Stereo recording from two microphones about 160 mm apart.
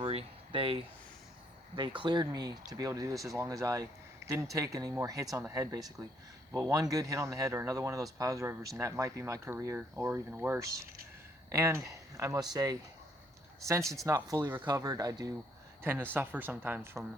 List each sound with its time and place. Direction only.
0.0 s a sound: 35° right (ahead or behind)
2.0 s speech: 30° right (ahead or behind)
13.9 s speech: 20° right (ahead or behind)